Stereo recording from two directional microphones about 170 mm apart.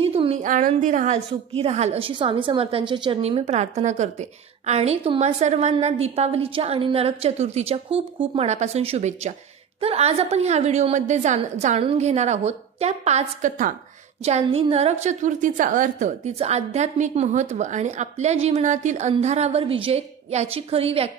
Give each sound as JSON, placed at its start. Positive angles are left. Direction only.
{"t": 0.0, "sound": "a sound", "side_deg": -35}
{"t": 0.4, "sound": "a woman's voice", "side_deg": -50}
{"t": 14.2, "sound": "a woman's voice", "side_deg": -35}